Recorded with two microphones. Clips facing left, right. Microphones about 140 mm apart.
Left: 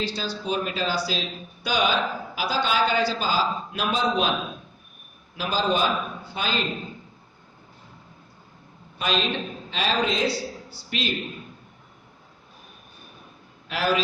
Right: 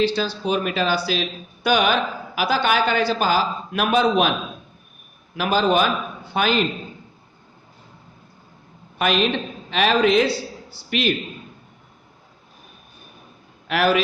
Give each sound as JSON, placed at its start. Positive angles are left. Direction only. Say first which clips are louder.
{"t": 0.0, "sound": "speech", "louder": "right 8 dB", "side_deg": -70}
{"t": 5.4, "sound": "a man's voice", "louder": "right 5 dB", "side_deg": -65}
{"t": 9.0, "sound": "a woman's voice", "louder": "right 5 dB", "side_deg": -65}
{"t": 13.7, "sound": "a man's voice", "louder": "right 5 dB", "side_deg": -70}